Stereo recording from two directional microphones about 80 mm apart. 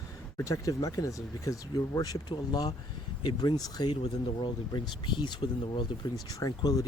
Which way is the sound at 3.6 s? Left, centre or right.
Left.